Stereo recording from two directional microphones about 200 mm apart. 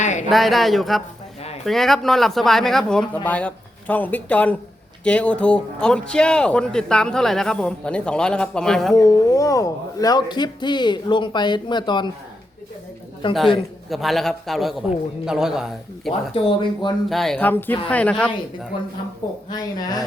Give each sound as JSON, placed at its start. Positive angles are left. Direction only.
{"t": 0.0, "sound": "a sound", "side_deg": 35}
{"t": 0.3, "sound": "speech", "side_deg": 0}
{"t": 9.0, "sound": "speech", "side_deg": 15}
{"t": 13.2, "sound": "speech", "side_deg": 25}
{"t": 13.9, "sound": "speech", "side_deg": 0}
{"t": 16.3, "sound": "speech", "side_deg": 25}
{"t": 17.1, "sound": "speech", "side_deg": 0}
{"t": 19.5, "sound": "speech", "side_deg": 20}